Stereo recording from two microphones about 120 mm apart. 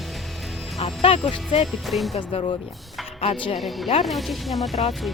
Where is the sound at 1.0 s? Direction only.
50° left (ahead or behind).